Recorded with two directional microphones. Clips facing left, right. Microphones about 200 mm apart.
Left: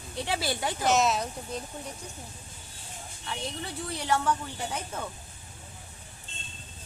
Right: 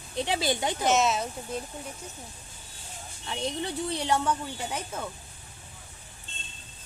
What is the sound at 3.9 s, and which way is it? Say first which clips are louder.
Speech: even; 20° right (ahead or behind).